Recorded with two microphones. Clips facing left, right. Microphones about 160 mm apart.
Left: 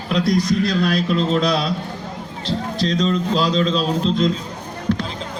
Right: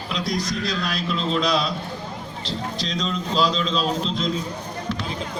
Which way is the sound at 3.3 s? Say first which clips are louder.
Even; 50° left (ahead or behind).